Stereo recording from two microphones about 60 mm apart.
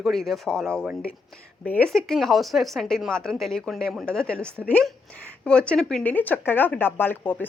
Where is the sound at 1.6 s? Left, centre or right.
Left.